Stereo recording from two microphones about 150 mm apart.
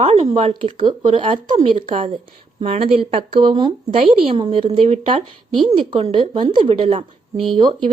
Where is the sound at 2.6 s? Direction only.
45° right (ahead or behind).